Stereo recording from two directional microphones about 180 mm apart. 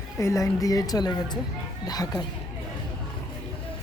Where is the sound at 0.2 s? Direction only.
15° left (ahead or behind).